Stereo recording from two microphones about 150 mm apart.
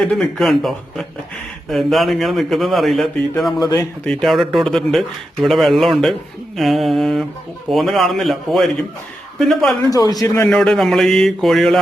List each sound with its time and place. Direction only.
0.0 s speech: centre (ahead or behind)
9.8 s speech: 25° left (ahead or behind)
10.5 s speech: 5° left (ahead or behind)